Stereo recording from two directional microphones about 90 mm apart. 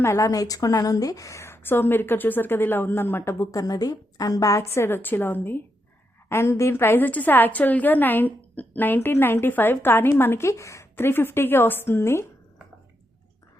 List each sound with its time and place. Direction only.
0.0 s a woman's voice: 30° left (ahead or behind)
0.3 s a woman's voice: 45° left (ahead or behind); by 12.2 s 30° left (ahead or behind)